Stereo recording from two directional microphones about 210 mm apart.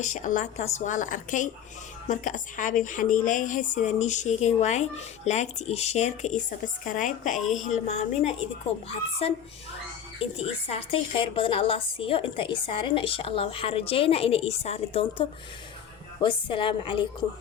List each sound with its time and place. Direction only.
0.0 s a woman's voice: 35° left (ahead or behind)
10.3 s a woman's voice: 25° left (ahead or behind)